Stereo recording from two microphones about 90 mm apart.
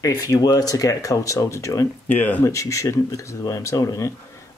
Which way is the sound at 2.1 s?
20° left (ahead or behind).